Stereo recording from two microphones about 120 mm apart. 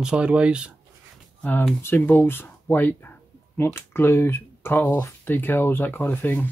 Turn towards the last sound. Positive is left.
turn(degrees=15)  # may be behind; listen again after turning